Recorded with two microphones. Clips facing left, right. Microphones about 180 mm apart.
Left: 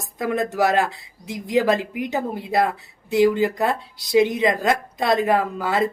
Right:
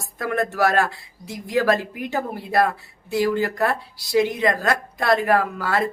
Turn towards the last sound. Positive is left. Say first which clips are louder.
# left 1 dB
turn(degrees=20)  # may be behind; listen again after turning